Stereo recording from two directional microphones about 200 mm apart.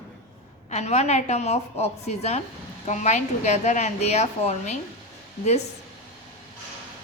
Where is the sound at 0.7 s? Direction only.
35° left (ahead or behind).